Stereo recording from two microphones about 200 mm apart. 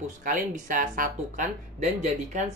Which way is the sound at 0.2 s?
40° right (ahead or behind).